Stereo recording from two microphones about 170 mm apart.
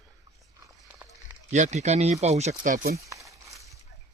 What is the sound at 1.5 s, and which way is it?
Speech, 45° right (ahead or behind).